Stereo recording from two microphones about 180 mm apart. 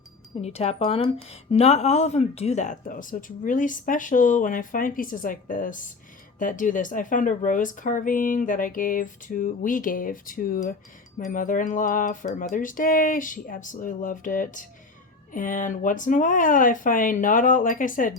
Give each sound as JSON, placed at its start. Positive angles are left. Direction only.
{"t": 0.4, "sound": "speech", "side_deg": 35}